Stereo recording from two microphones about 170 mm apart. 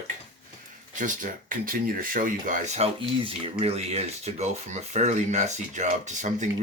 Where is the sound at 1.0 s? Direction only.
50° right (ahead or behind).